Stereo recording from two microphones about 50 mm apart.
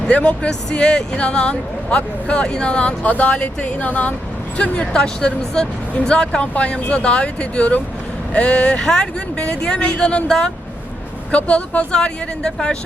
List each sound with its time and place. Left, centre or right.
0.1 s speech: left
4.8 s speech: centre
11.9 s speech: centre